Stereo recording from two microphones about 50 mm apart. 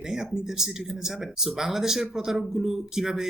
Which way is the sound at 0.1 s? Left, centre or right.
Centre.